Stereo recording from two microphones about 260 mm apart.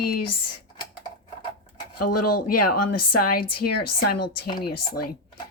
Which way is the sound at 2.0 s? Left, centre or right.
Left.